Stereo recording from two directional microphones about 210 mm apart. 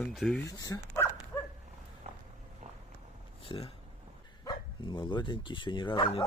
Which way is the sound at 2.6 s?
35° right (ahead or behind).